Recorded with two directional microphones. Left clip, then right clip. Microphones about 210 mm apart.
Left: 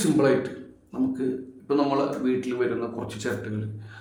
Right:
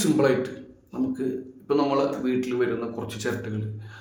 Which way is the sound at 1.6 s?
5° right (ahead or behind).